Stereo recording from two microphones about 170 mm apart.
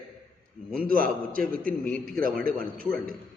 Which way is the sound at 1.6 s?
5° left (ahead or behind).